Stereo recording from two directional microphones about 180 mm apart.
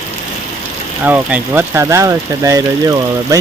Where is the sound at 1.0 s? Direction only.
10° right (ahead or behind).